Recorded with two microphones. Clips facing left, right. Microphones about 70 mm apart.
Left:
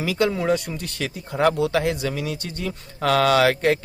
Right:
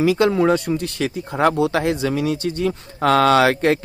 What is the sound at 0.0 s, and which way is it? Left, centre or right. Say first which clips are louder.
Speech: right 6 dB; right.